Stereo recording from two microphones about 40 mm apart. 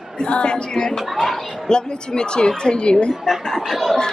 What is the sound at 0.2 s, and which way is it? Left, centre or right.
Speech, left.